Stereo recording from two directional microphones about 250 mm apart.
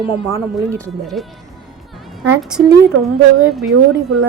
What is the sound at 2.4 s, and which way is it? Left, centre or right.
Speech, centre.